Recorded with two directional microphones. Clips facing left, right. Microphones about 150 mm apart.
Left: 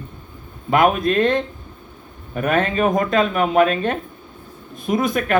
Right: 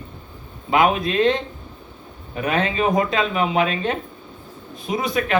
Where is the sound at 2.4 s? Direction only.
50° left (ahead or behind).